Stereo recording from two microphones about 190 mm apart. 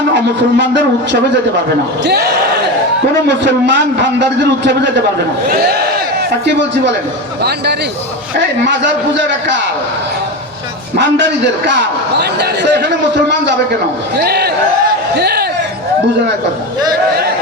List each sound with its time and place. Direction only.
0.5 s a man's voice: 65° right (ahead or behind)
3.2 s a man's voice: 65° right (ahead or behind)
6.4 s a man's voice: 65° right (ahead or behind)
10.9 s a man's voice: 65° right (ahead or behind)